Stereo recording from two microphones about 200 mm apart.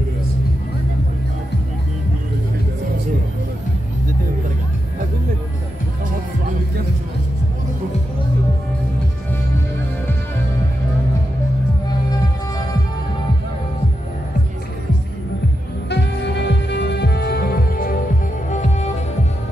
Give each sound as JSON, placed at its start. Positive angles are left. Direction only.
{"t": 15.9, "sound": "music", "side_deg": 60}